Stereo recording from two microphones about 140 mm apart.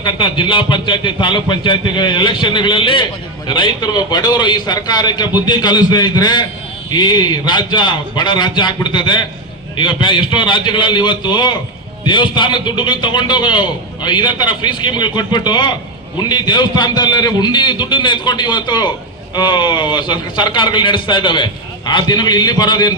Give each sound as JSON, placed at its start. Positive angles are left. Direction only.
{"t": 0.0, "sound": "speech", "side_deg": 35}